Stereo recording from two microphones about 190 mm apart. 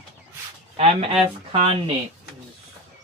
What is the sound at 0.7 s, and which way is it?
Speech, 30° right (ahead or behind).